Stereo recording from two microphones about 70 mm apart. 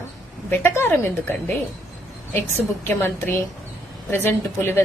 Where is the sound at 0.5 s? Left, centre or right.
Left.